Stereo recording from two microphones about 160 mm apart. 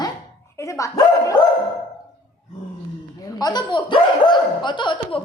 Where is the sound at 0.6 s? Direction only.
20° left (ahead or behind).